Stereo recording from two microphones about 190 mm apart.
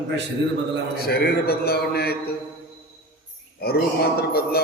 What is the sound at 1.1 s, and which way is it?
Mantra, 55° left (ahead or behind).